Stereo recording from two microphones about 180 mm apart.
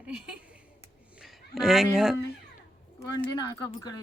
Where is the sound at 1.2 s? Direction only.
Centre (ahead or behind).